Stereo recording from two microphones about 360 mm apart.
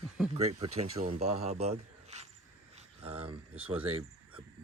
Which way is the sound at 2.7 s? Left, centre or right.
Centre.